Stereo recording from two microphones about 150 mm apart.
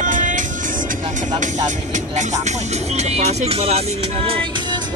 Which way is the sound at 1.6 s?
55° right (ahead or behind).